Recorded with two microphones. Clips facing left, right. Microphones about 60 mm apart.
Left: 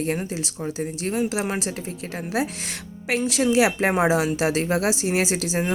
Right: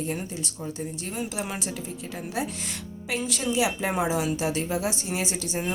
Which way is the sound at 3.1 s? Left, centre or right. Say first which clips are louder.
Left 7 dB; left.